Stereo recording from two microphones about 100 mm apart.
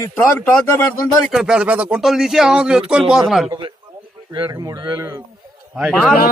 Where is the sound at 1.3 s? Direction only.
5° right (ahead or behind).